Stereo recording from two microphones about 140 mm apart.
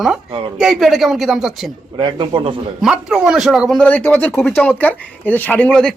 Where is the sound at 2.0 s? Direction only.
35° right (ahead or behind).